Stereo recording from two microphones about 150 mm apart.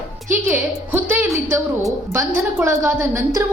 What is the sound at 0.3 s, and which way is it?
A woman's voice, 15° right (ahead or behind).